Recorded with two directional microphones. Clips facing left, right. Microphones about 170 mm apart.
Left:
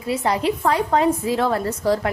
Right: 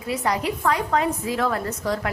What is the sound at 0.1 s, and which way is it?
A woman's voice, 25° left (ahead or behind).